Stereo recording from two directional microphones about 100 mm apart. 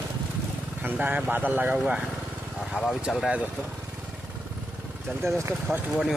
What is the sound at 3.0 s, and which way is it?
Speech, 5° right (ahead or behind).